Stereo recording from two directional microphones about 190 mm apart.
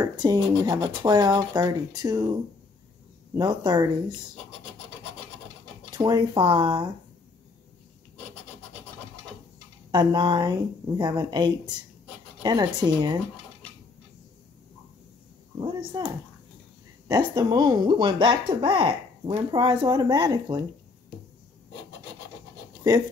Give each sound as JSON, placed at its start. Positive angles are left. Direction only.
{"t": 0.0, "sound": "speech", "side_deg": -20}
{"t": 3.3, "sound": "speech", "side_deg": -20}
{"t": 5.9, "sound": "speech", "side_deg": -20}
{"t": 9.8, "sound": "speech", "side_deg": -25}
{"t": 15.9, "sound": "speech", "side_deg": -25}